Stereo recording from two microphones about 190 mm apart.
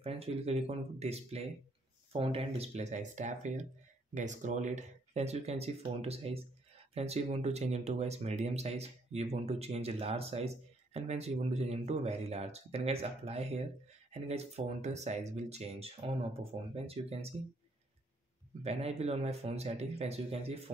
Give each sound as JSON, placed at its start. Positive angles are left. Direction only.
{"t": 0.0, "sound": "speech", "side_deg": -30}
{"t": 18.6, "sound": "speech", "side_deg": -35}